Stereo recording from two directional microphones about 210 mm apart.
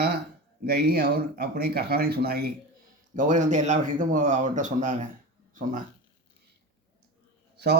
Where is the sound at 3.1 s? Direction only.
35° right (ahead or behind).